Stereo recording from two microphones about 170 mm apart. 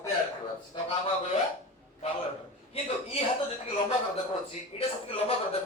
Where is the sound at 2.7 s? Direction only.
35° left (ahead or behind).